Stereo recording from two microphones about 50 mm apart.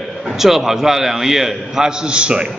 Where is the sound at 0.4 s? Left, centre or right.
Centre.